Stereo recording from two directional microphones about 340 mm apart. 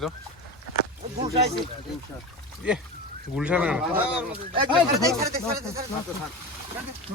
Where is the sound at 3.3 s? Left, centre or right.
Centre.